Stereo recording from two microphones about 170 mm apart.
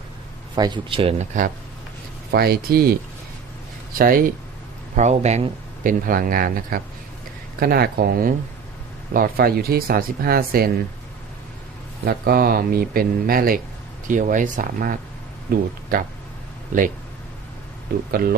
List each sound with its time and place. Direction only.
0.5 s speech: 25° right (ahead or behind)
1.3 s speech: 45° right (ahead or behind)
2.3 s speech: 65° right (ahead or behind)
4.9 s speech: 40° right (ahead or behind); by 10.7 s 60° right (ahead or behind)
12.0 s speech: 65° right (ahead or behind)